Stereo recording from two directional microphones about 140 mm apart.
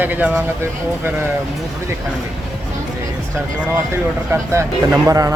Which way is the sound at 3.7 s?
15° right (ahead or behind).